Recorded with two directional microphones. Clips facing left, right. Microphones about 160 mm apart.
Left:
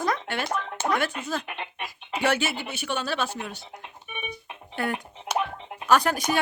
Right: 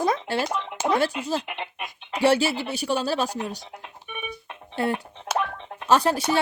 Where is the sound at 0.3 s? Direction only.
35° right (ahead or behind).